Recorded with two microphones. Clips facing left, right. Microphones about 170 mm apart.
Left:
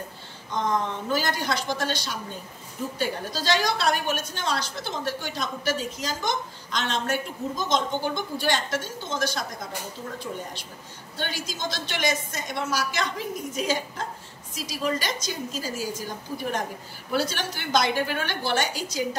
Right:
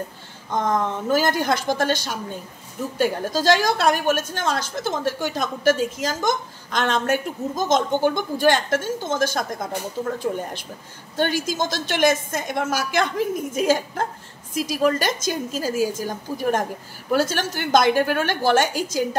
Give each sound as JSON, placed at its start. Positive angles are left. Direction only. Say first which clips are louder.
{"t": 0.5, "sound": "a woman's voice", "louder": "right 4 dB", "side_deg": -50}